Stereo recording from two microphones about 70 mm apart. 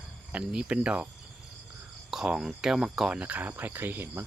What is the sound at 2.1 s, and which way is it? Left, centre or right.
Speech, centre.